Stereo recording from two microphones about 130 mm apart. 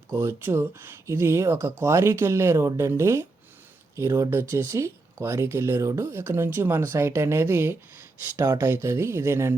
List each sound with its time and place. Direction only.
0.2 s speech: 20° right (ahead or behind)